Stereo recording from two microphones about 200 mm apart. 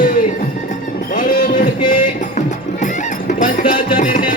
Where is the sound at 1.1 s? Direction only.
45° left (ahead or behind).